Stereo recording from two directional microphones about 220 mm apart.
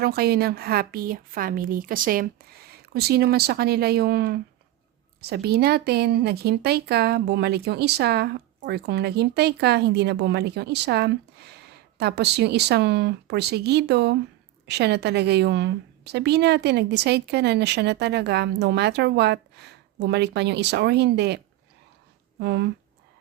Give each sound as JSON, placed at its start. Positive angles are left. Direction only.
{"t": 0.0, "sound": "speech", "side_deg": -45}